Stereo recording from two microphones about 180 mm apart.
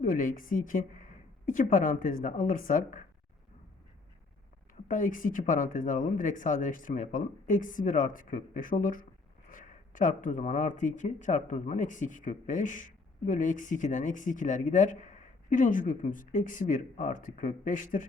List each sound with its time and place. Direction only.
0.0 s speech: 50° left (ahead or behind)
4.9 s speech: 45° left (ahead or behind)